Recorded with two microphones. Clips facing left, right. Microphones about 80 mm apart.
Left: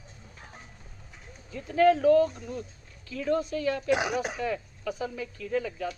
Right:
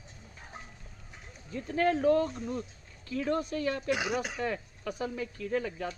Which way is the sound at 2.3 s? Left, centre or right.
Right.